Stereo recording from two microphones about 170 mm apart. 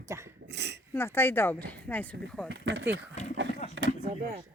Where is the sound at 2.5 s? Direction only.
90° right.